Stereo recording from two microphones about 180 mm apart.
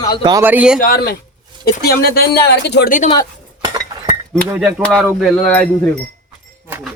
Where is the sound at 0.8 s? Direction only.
55° left (ahead or behind).